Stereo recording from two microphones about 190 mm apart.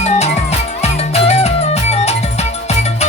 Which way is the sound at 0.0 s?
35° left (ahead or behind).